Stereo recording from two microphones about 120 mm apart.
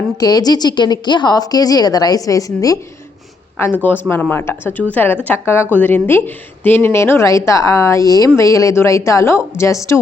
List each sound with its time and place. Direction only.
0.2 s a woman's voice: 35° left (ahead or behind)
3.6 s a woman's voice: 15° left (ahead or behind)